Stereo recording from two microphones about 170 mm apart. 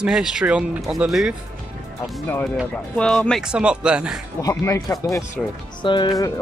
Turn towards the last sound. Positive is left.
turn(degrees=30)  # may be behind; listen again after turning